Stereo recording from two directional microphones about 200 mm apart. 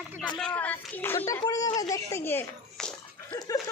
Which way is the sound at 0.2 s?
5° left (ahead or behind).